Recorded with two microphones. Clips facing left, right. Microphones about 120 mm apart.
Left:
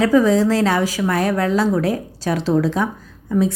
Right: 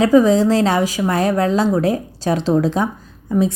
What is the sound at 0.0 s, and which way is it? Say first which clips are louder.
A woman's voice: right 2 dB; 20° right (ahead or behind).